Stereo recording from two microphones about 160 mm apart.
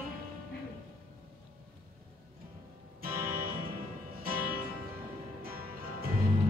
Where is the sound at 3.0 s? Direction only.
65° right (ahead or behind).